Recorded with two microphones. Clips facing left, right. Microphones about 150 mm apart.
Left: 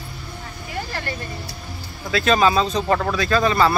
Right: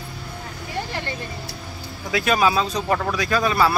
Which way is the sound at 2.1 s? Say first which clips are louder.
Left 2 dB; 10° right (ahead or behind).